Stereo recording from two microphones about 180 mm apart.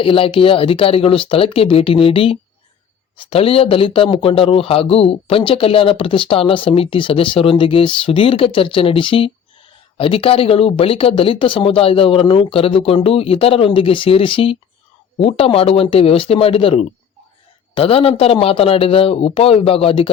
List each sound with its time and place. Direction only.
0.0 s speech: 30° left (ahead or behind)